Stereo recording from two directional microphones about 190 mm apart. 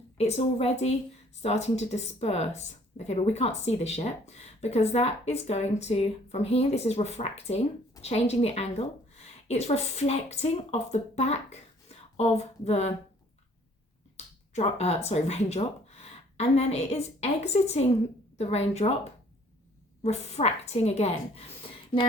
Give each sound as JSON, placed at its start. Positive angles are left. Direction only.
{"t": 0.2, "sound": "speech", "side_deg": 35}
{"t": 14.2, "sound": "finger snapping", "side_deg": 35}
{"t": 14.5, "sound": "speech", "side_deg": 35}
{"t": 20.0, "sound": "speech", "side_deg": 35}